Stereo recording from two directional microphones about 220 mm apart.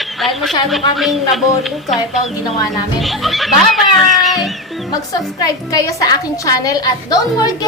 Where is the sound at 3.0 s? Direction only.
Centre (ahead or behind).